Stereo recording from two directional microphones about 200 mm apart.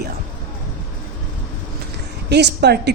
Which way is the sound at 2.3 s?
55° right (ahead or behind).